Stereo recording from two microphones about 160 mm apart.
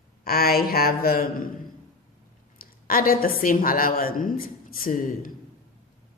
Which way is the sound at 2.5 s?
65° left (ahead or behind).